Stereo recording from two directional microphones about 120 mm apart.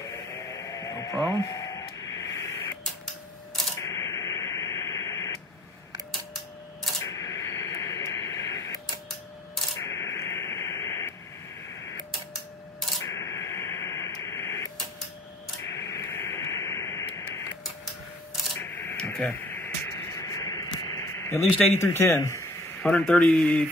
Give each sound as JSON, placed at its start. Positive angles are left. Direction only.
{"t": 0.0, "sound": "radio", "side_deg": 25}
{"t": 3.7, "sound": "radio", "side_deg": 25}
{"t": 7.0, "sound": "radio", "side_deg": 25}
{"t": 11.7, "sound": "music", "side_deg": 20}
{"t": 13.0, "sound": "radio", "side_deg": 25}
{"t": 18.6, "sound": "radio", "side_deg": 15}
{"t": 19.4, "sound": "a sound", "side_deg": 20}
{"t": 21.5, "sound": "speech", "side_deg": 20}
{"t": 22.8, "sound": "speech", "side_deg": 5}